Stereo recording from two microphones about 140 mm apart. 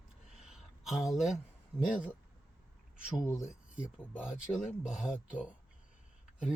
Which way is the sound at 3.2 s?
20° left (ahead or behind).